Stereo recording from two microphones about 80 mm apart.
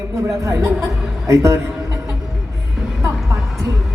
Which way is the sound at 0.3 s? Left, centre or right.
Right.